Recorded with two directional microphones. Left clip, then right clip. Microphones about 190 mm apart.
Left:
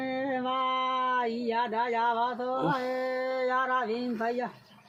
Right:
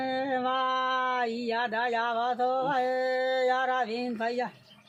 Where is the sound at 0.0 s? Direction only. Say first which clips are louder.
Right 2 dB; 40° right (ahead or behind).